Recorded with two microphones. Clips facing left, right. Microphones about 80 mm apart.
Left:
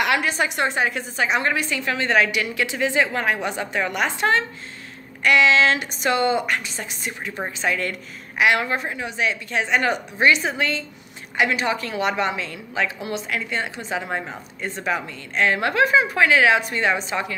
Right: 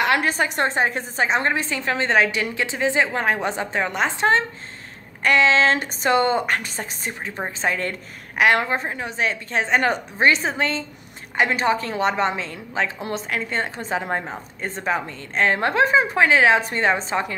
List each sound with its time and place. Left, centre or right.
0.0 s a woman's voice: right
8.6 s a woman's voice: right